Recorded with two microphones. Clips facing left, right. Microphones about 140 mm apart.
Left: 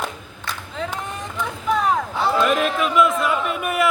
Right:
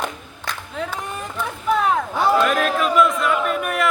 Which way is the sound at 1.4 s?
Centre (ahead or behind).